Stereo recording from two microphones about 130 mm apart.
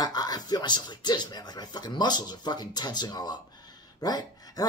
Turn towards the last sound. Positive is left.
turn(degrees=30)  # may be behind; listen again after turning